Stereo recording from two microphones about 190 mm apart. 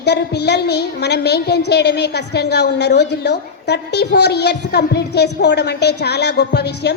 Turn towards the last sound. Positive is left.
turn(degrees=60)  # may be behind; listen again after turning